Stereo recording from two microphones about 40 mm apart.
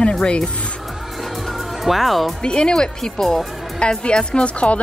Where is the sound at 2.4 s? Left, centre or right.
Left.